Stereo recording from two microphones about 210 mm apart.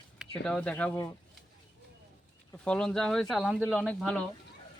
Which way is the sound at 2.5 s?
5° left (ahead or behind).